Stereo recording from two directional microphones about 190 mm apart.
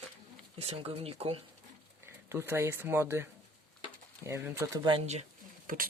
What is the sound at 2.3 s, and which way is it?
Speech, 15° right (ahead or behind).